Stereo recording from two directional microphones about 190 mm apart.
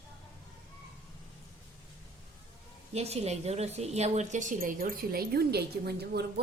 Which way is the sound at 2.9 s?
35° right (ahead or behind).